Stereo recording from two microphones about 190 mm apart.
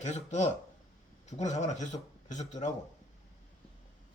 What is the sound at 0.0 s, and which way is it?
Speech, 35° left (ahead or behind).